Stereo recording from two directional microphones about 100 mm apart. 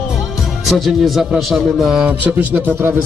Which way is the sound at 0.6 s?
Centre (ahead or behind).